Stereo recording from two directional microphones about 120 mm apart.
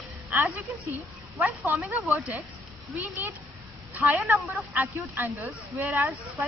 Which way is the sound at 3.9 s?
15° right (ahead or behind).